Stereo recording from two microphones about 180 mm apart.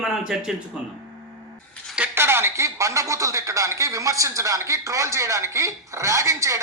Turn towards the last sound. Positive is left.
turn(degrees=-15)  # may be behind; listen again after turning